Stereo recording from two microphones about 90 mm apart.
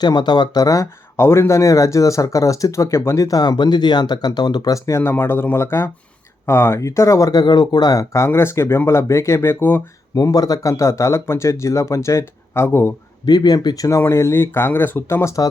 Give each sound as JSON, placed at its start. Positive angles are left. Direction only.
{"t": 0.0, "sound": "speech", "side_deg": 50}
{"t": 8.1, "sound": "speech", "side_deg": 30}
{"t": 10.2, "sound": "speech", "side_deg": 45}
{"t": 13.2, "sound": "speech", "side_deg": 50}